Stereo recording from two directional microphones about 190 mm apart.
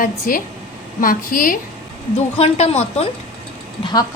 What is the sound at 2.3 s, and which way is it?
Speech, 30° left (ahead or behind).